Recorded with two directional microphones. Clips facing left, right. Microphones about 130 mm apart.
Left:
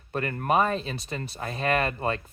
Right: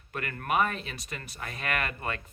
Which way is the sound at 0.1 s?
30° left (ahead or behind).